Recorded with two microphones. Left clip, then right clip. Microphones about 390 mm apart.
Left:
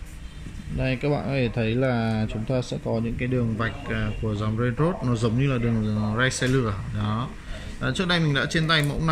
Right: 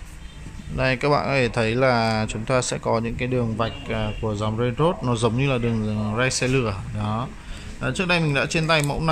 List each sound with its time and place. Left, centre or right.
0.8 s speech: centre
2.7 s speech: right
3.2 s speech: centre